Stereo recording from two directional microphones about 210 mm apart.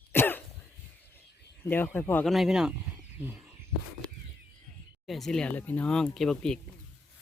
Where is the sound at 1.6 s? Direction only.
10° left (ahead or behind); by 3.4 s 10° right (ahead or behind).